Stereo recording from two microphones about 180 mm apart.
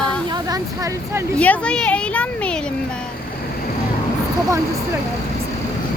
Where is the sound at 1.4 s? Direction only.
5° left (ahead or behind).